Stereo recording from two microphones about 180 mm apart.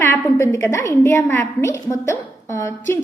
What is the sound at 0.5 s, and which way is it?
A woman's voice, 15° left (ahead or behind).